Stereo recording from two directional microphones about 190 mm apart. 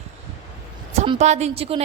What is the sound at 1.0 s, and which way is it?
Speech, 35° right (ahead or behind).